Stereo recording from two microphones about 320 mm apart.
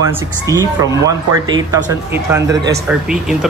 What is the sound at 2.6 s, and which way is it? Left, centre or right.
Speech, right.